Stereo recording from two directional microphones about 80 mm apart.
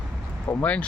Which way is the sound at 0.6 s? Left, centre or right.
Centre.